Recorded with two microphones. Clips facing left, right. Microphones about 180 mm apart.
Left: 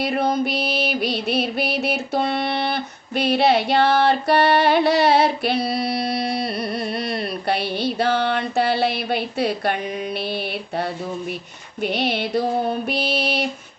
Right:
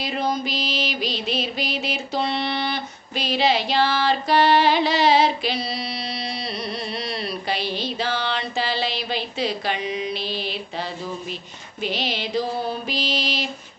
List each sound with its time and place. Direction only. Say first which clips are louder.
0.0 s music: left 4 dB; 60° left (ahead or behind)